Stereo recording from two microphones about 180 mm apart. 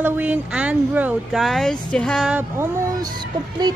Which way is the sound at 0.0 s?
10° right (ahead or behind).